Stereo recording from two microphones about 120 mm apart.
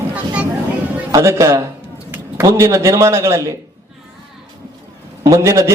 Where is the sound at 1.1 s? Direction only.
25° right (ahead or behind).